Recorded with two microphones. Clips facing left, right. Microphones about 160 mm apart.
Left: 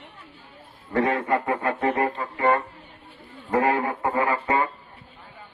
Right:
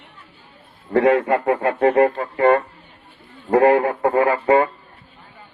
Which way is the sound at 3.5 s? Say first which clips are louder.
Right 8 dB; 30° right (ahead or behind).